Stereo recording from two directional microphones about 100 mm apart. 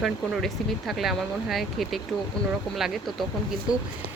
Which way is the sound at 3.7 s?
40° left (ahead or behind).